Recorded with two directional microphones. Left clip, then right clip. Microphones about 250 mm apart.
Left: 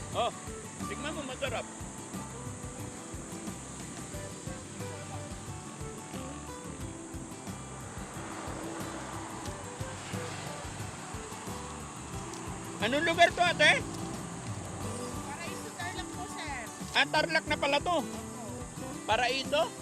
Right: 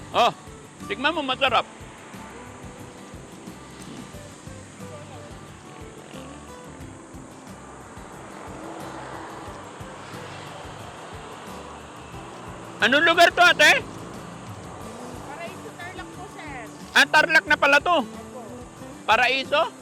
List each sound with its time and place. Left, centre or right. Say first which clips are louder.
0.1 s speech: right 12 dB; right
0.9 s speech: right 15 dB; right
12.8 s a man's voice: right 9 dB; centre
16.4 s music: right 3 dB; left
16.9 s a man's voice: right 11 dB; centre
19.0 s a man's voice: right 10 dB; centre